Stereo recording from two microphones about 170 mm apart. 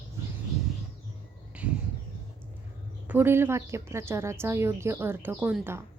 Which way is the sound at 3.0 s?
10° right (ahead or behind).